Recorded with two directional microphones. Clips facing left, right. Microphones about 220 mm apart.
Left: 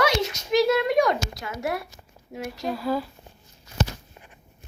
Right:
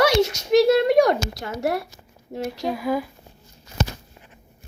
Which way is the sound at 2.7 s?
15° right (ahead or behind).